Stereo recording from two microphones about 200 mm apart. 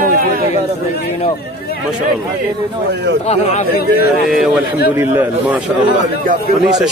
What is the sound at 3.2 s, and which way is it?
Speech, 35° left (ahead or behind).